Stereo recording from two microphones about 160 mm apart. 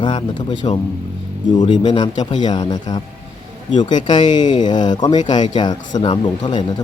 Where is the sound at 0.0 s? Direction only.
30° left (ahead or behind).